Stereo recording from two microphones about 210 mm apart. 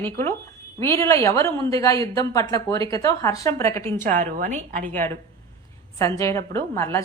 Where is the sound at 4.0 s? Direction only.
40° right (ahead or behind).